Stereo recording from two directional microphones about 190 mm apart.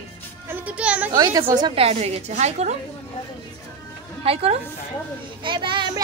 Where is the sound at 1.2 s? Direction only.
20° right (ahead or behind).